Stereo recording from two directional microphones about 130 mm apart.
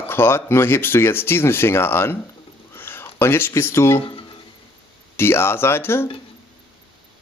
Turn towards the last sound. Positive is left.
turn(degrees=20)  # may be behind; listen again after turning